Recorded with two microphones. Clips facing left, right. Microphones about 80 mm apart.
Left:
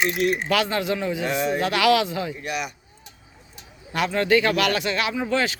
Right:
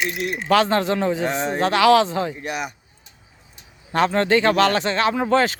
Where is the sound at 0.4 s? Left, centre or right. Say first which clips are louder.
Right 5 dB; right.